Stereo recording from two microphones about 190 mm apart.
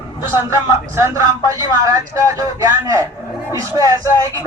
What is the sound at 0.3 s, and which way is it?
Speech, 15° right (ahead or behind).